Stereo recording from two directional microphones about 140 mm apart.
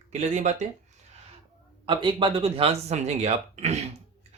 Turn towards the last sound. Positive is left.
turn(degrees=-50)  # may be behind; listen again after turning